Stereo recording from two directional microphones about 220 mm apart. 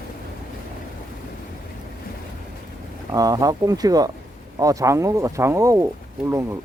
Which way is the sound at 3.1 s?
15° right (ahead or behind).